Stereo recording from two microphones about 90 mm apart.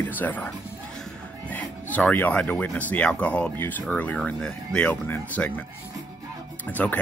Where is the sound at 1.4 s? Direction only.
15° left (ahead or behind).